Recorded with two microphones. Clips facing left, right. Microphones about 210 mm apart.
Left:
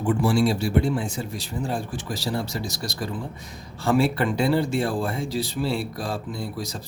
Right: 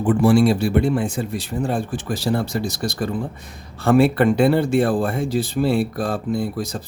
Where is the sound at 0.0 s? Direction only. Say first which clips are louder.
Right 6 dB; 55° right (ahead or behind).